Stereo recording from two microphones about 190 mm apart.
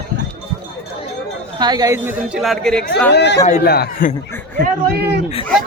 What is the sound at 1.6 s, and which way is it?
Speech, 20° right (ahead or behind).